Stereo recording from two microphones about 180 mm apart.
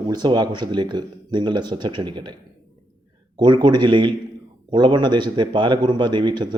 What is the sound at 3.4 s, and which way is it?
Speech, 25° right (ahead or behind).